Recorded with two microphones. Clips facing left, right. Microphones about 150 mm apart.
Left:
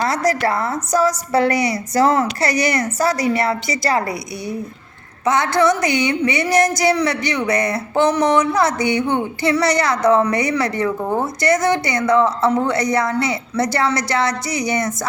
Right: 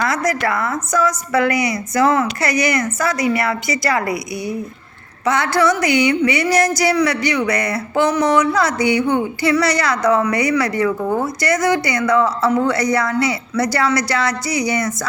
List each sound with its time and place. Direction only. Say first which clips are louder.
0.0 s a woman's voice: left 1 dB; 35° left (ahead or behind)